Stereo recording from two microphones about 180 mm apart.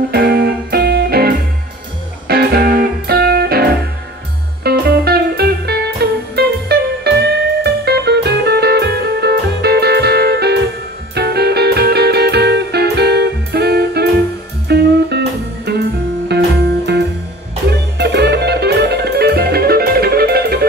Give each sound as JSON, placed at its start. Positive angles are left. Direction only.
{"t": 0.1, "sound": "music", "side_deg": -55}